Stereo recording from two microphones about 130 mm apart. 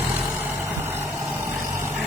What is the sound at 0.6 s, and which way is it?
Vehicle, 20° right (ahead or behind).